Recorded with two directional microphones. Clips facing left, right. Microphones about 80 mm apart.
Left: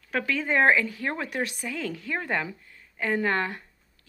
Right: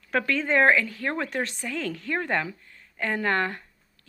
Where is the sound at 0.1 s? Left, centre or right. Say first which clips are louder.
Right 2 dB; centre.